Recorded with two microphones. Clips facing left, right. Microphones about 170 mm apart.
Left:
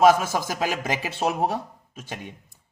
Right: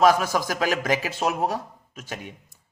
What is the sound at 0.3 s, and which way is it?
Speech, 20° left (ahead or behind).